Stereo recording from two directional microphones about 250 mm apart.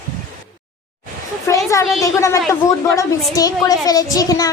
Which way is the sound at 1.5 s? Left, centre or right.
Centre.